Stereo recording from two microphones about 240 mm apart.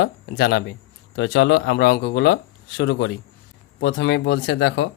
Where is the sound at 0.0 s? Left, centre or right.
Left.